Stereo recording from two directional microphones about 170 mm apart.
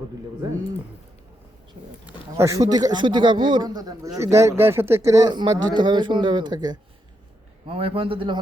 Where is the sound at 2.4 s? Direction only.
20° right (ahead or behind).